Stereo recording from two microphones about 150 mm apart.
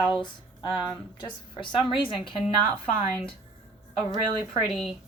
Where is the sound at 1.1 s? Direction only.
30° left (ahead or behind).